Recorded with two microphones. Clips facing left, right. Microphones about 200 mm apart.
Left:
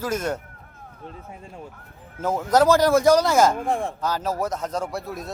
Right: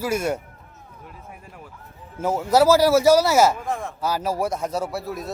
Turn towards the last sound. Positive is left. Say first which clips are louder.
# right 2 dB
turn(degrees=0)  # may be behind; listen again after turning